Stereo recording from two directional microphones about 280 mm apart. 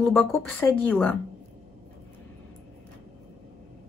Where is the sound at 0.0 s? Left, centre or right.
Centre.